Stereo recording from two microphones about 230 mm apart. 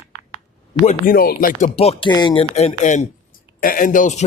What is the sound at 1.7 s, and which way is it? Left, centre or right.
Speech, left.